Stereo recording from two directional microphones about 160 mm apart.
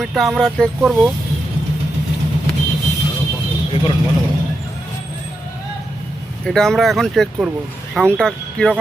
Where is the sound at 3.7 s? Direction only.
30° left (ahead or behind).